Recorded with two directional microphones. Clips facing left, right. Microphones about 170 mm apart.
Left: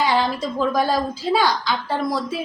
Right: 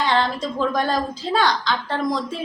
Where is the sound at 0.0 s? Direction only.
10° left (ahead or behind).